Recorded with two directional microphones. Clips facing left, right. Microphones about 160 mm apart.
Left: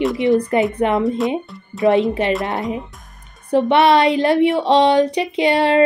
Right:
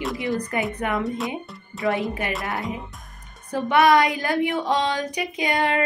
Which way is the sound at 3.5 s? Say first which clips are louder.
Left 5 dB; 25° left (ahead or behind).